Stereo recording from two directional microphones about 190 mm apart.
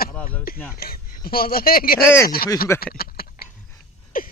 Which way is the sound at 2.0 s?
15° left (ahead or behind).